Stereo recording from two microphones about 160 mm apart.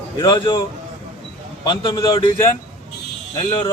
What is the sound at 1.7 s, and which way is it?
Speech, 30° left (ahead or behind).